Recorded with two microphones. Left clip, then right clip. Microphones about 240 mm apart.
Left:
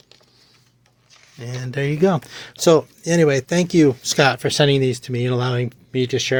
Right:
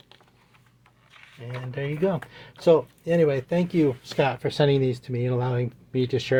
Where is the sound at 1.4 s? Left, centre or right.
Left.